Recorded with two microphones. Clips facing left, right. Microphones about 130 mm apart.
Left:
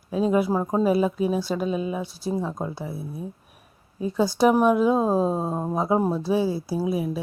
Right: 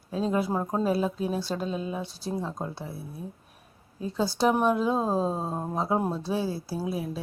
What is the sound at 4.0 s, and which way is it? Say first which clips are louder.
A woman's voice: left 5 dB; 10° left (ahead or behind).